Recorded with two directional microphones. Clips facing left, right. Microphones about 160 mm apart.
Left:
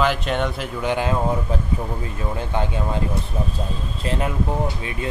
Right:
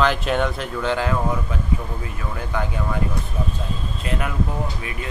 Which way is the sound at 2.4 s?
25° left (ahead or behind).